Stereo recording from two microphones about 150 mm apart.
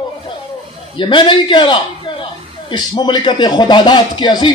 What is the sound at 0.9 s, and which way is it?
A man's voice, 35° left (ahead or behind).